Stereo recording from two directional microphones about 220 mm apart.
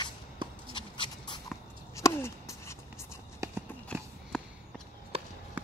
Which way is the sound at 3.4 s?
15° right (ahead or behind).